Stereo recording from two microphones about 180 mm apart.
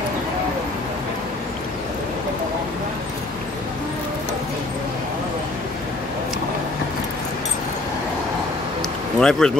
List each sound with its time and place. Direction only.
9.2 s speech: 5° left (ahead or behind)